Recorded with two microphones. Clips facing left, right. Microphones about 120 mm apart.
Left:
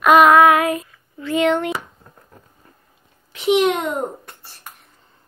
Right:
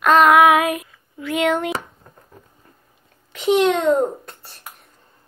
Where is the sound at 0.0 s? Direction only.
5° left (ahead or behind).